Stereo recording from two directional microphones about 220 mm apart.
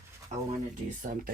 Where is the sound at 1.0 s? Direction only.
35° right (ahead or behind).